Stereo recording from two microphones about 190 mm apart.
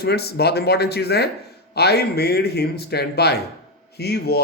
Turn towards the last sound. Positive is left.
turn(degrees=55)  # may be behind; listen again after turning